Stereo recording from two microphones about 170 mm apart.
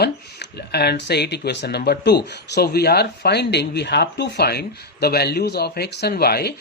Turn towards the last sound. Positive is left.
turn(degrees=65)  # may be behind; listen again after turning